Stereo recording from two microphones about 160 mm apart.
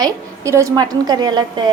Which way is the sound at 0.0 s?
20° right (ahead or behind).